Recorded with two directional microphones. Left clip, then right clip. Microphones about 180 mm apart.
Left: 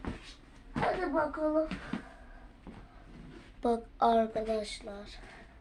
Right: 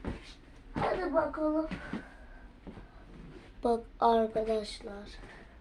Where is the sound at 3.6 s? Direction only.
15° left (ahead or behind).